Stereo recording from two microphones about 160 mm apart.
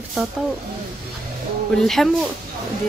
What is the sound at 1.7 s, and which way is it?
Speech, centre (ahead or behind).